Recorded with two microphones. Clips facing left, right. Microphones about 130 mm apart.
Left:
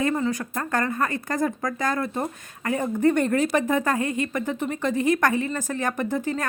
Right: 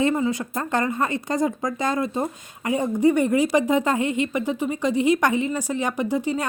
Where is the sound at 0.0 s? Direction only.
20° right (ahead or behind).